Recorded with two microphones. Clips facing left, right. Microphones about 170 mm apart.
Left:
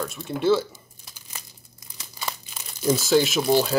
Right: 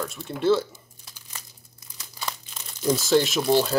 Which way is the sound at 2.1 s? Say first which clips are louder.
Left 1 dB; 5° left (ahead or behind).